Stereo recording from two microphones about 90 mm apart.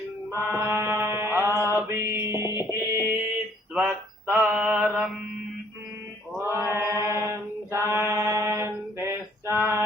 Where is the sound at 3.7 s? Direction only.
15° right (ahead or behind).